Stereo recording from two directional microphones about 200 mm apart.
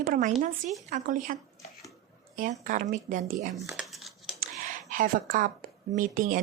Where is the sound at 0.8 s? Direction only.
40° right (ahead or behind).